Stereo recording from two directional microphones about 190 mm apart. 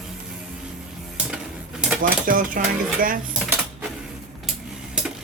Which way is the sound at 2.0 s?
45° right (ahead or behind).